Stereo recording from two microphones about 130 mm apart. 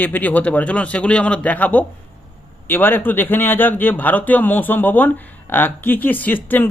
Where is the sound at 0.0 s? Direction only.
15° left (ahead or behind).